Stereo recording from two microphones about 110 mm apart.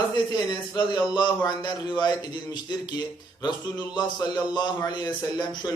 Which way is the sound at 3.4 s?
40° left (ahead or behind).